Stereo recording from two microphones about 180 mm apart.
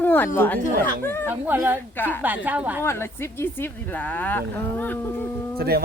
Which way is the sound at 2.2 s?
10° right (ahead or behind).